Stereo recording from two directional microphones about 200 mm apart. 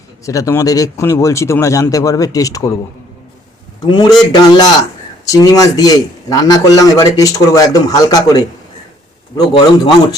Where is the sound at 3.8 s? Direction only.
20° left (ahead or behind).